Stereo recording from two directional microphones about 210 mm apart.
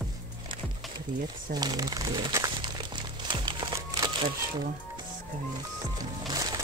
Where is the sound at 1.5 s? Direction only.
20° right (ahead or behind).